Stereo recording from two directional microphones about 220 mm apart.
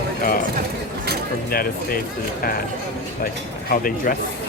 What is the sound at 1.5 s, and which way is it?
Speech, 40° left (ahead or behind).